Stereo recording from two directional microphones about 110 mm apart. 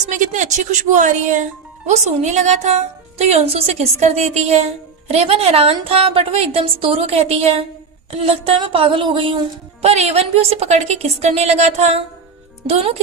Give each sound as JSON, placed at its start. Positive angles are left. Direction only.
{"t": 0.3, "sound": "a woman's voice", "side_deg": -90}
{"t": 9.8, "sound": "a woman's voice", "side_deg": -70}
{"t": 12.6, "sound": "speech", "side_deg": -65}